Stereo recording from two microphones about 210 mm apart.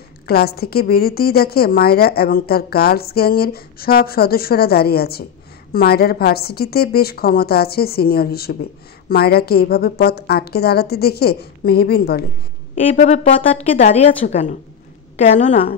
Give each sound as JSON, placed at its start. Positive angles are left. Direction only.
{"t": 0.3, "sound": "a woman's voice", "side_deg": 50}
{"t": 12.9, "sound": "a woman's voice", "side_deg": 30}